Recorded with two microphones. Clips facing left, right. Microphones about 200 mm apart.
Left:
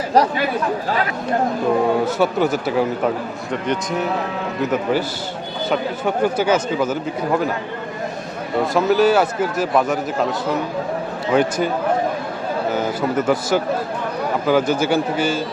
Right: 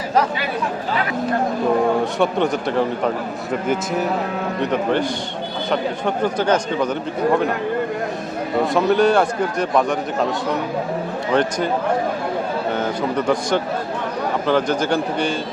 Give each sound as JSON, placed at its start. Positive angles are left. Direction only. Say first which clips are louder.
{"t": 0.1, "sound": "speech", "louder": "left 3 dB", "side_deg": 35}
{"t": 2.1, "sound": "a man's voice", "louder": "left 1 dB", "side_deg": 5}
{"t": 4.6, "sound": "a man's voice", "louder": "even", "side_deg": 5}
{"t": 8.7, "sound": "a man's voice", "louder": "left 1 dB", "side_deg": 5}
{"t": 12.7, "sound": "a man's voice", "louder": "left 2 dB", "side_deg": 5}